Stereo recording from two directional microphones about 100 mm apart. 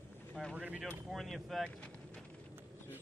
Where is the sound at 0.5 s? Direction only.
15° right (ahead or behind).